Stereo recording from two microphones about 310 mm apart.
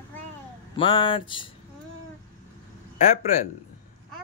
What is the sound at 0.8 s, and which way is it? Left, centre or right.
Speech, centre.